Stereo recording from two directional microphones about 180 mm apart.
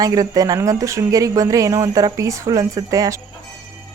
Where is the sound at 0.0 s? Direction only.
20° right (ahead or behind).